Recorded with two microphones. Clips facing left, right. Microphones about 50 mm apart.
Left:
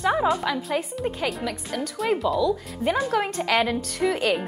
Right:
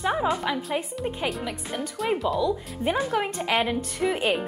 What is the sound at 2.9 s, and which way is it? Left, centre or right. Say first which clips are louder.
A woman's voice: left 2 dB; centre.